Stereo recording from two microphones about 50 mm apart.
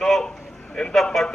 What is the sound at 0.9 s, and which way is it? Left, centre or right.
Speech, centre.